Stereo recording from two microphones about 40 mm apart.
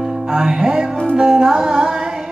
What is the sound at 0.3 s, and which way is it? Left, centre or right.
Music, centre.